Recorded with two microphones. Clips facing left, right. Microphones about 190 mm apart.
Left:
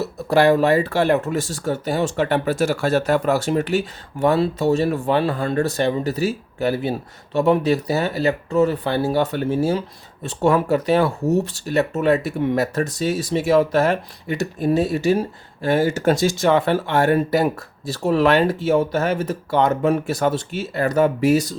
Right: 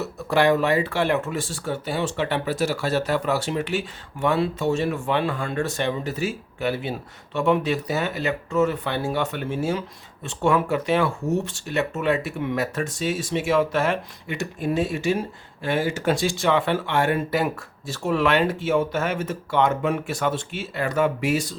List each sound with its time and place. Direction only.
0.0 s speech: 35° left (ahead or behind)